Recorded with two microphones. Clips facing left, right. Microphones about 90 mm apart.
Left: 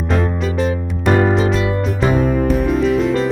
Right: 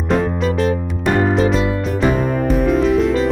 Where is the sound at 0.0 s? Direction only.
Centre (ahead or behind).